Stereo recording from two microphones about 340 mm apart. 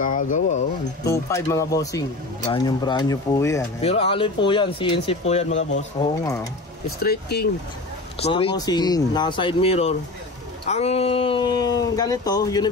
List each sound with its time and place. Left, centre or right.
0.0 s speech: left
1.0 s speech: centre
7.0 s speech: left
8.2 s speech: centre